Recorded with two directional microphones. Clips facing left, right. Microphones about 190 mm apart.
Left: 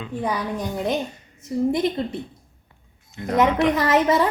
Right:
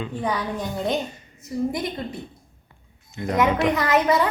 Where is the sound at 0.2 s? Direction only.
10° left (ahead or behind).